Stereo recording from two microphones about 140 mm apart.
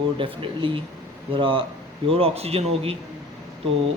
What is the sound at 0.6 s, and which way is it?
Speech, 40° right (ahead or behind).